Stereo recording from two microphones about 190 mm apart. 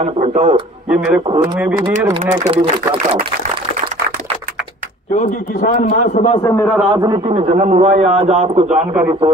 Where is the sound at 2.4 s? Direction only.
30° right (ahead or behind).